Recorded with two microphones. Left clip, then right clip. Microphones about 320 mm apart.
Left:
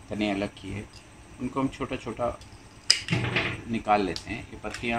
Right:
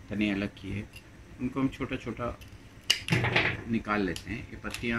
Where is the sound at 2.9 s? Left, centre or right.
Centre.